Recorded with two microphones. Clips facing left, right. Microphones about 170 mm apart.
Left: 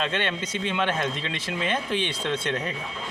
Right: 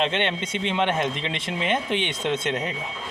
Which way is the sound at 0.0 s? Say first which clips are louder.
Right 3 dB; 25° right (ahead or behind).